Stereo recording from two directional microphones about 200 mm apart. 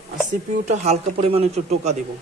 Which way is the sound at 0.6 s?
35° right (ahead or behind).